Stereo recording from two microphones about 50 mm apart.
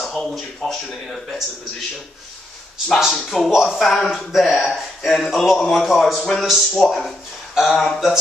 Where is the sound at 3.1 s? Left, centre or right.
Centre.